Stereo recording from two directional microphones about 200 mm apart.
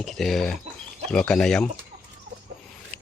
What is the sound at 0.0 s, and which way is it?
Speech, centre (ahead or behind).